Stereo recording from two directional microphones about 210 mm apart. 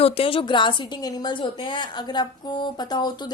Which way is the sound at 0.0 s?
25° left (ahead or behind).